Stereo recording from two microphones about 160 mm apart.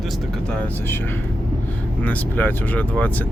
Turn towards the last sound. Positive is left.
turn(degrees=10)  # may be behind; listen again after turning